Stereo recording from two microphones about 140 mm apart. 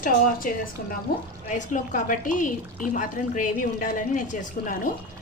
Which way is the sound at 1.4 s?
60° left (ahead or behind).